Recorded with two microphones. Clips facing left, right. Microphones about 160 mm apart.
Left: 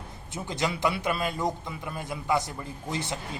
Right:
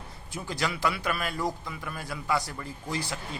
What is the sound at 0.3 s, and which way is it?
A man's voice, 20° left (ahead or behind).